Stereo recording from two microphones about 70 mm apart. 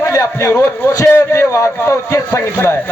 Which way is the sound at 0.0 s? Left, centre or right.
Left.